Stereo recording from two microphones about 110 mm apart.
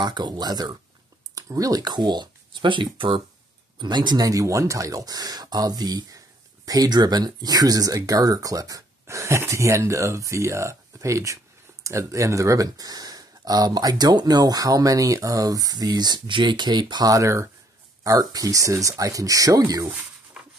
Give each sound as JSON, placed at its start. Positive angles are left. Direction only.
{"t": 0.0, "sound": "speech", "side_deg": -40}